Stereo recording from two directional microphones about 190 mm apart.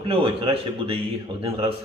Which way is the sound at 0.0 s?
30° right (ahead or behind).